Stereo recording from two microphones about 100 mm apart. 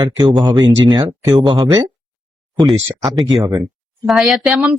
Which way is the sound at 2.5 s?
Centre (ahead or behind).